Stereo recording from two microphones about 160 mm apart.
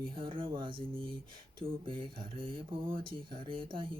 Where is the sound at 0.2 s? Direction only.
30° right (ahead or behind).